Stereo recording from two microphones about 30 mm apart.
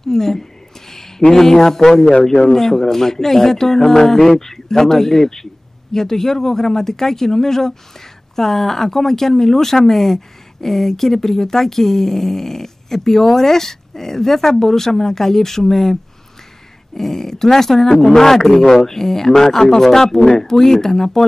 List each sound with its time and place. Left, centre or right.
0.0 s speech: centre
0.8 s a sound: centre
1.3 s speech: centre